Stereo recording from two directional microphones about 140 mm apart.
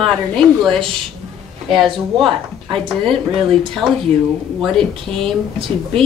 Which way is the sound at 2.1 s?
Centre (ahead or behind).